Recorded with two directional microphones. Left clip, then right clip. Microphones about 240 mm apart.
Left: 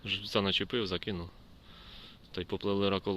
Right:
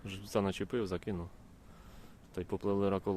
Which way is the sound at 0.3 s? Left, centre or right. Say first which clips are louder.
Left 2 dB; centre.